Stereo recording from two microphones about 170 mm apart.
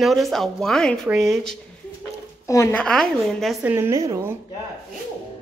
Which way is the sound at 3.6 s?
15° right (ahead or behind).